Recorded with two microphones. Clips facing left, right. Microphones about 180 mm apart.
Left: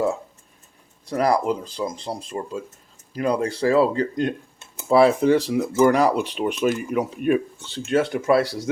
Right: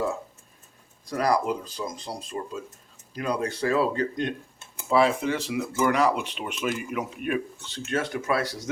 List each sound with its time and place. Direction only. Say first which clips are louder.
1.2 s speech: left 4 dB; 25° left (ahead or behind)